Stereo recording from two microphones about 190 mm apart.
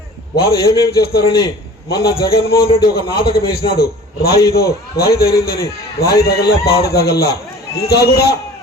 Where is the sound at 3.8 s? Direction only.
55° left (ahead or behind).